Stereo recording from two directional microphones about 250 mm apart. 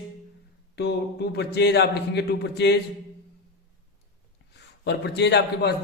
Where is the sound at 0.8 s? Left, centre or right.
Left.